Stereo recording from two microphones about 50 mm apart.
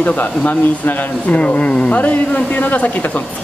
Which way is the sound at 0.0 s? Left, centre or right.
Left.